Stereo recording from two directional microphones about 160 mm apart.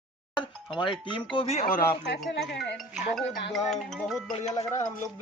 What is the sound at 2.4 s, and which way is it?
Speech, 90° left.